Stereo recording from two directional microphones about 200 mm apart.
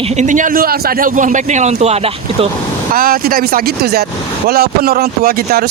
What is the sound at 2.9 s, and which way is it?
Speech, 45° right (ahead or behind).